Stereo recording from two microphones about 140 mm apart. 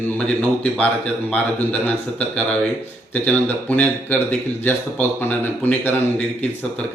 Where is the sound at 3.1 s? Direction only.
10° left (ahead or behind).